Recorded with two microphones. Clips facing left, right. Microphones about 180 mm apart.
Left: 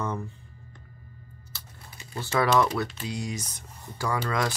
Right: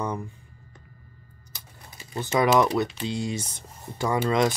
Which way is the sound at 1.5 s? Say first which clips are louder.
Right 1 dB; 15° right (ahead or behind).